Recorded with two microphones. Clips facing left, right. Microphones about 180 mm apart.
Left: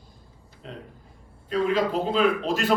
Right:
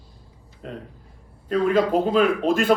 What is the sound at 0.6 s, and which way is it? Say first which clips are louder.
A man's voice: right 5 dB; 55° right (ahead or behind).